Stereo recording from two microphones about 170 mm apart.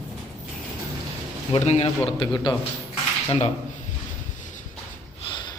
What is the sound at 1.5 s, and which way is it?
A man's voice, 40° left (ahead or behind).